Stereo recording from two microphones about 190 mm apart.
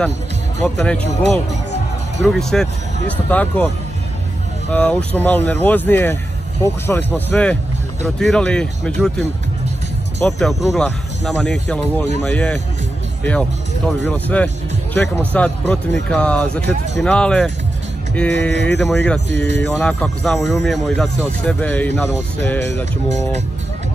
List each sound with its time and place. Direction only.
0.7 s speech: 5° left (ahead or behind)
2.2 s speech: centre (ahead or behind)
4.7 s speech: 10° left (ahead or behind)
10.2 s speech: centre (ahead or behind)
19.3 s speech: 65° right (ahead or behind)
19.8 s speech: 5° left (ahead or behind)